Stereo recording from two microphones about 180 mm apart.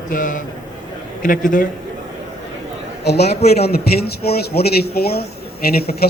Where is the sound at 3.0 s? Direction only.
65° left (ahead or behind).